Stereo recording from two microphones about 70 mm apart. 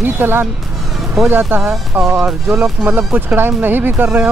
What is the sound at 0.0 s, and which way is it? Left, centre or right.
Speech, right.